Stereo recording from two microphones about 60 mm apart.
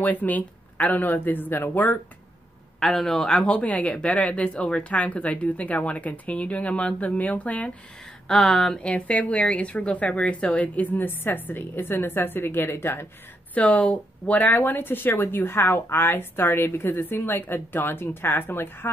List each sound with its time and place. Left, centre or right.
0.0 s speech: left
2.8 s a man's voice: centre
3.3 s speech: centre
8.3 s a man's voice: centre
8.7 s speech: left
13.6 s speech: left